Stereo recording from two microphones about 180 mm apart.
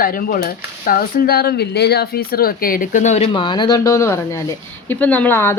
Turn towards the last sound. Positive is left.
turn(degrees=10)  # may be behind; listen again after turning